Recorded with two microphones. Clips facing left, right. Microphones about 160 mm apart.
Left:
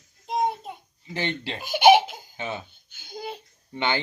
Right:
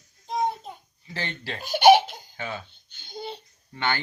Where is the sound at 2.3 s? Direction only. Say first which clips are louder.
Left 2 dB; 20° left (ahead or behind).